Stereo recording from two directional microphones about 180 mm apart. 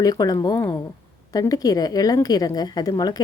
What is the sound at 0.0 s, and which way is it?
A woman's voice, 20° left (ahead or behind).